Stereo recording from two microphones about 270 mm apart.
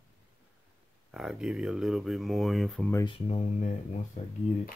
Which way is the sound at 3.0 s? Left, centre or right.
Left.